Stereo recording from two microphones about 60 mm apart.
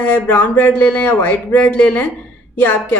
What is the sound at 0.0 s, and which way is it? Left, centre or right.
A woman's voice, left.